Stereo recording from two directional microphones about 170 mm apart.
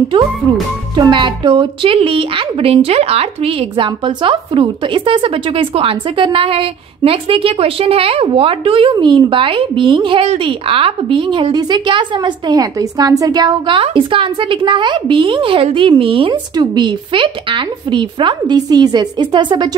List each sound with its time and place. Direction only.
0.9 s a woman's voice: 30° right (ahead or behind)